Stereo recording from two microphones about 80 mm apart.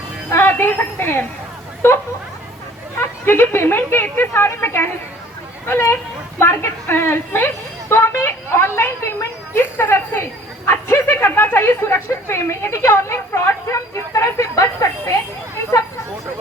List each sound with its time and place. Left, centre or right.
0.3 s a woman's voice: left
3.0 s a woman's voice: left